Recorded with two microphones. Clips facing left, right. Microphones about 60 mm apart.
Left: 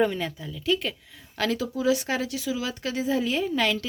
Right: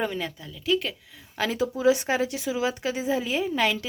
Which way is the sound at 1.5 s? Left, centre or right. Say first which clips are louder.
Right 2 dB; right.